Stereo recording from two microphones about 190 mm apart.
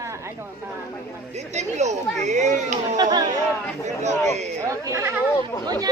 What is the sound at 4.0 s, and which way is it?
Speech, 35° right (ahead or behind).